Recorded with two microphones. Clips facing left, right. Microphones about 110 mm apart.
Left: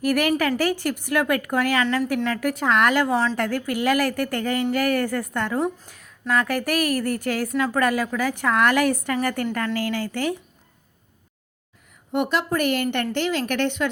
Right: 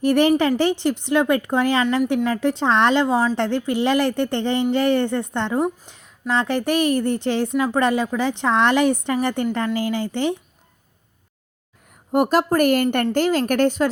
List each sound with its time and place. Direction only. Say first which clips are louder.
0.0 s a woman's voice: right 5 dB; 30° right (ahead or behind)
11.9 s a woman's voice: right 5 dB; 40° right (ahead or behind)